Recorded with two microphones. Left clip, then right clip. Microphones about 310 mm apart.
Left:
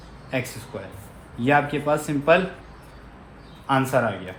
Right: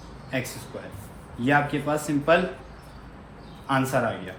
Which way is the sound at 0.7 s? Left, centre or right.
Left.